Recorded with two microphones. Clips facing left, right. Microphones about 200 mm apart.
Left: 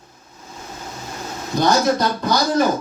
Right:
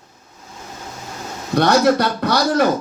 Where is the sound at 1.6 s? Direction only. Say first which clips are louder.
Right 3 dB; 70° right (ahead or behind).